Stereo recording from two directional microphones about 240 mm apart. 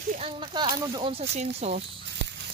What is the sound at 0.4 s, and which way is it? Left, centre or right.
Speech, centre.